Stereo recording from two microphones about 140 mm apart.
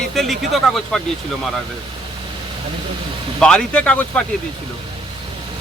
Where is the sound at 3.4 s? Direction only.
5° left (ahead or behind).